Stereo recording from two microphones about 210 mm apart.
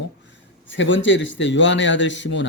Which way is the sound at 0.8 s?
60° left (ahead or behind).